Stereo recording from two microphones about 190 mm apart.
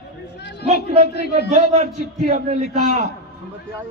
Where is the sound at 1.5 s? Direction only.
40° right (ahead or behind).